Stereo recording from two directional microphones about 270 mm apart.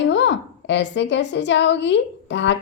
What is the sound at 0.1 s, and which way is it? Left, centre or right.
A woman's voice, left.